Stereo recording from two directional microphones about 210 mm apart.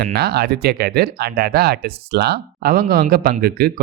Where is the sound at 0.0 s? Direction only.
50° right (ahead or behind).